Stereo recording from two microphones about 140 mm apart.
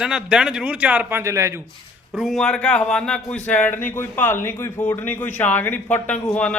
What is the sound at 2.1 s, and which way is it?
A man's voice, centre (ahead or behind).